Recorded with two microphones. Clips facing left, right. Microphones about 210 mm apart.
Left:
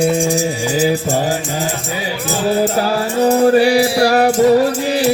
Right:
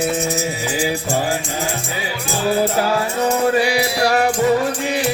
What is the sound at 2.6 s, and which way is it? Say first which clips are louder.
Music: left 2 dB; 35° left (ahead or behind).